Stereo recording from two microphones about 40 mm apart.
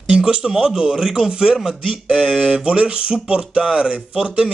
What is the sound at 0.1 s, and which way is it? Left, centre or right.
A man's voice, right.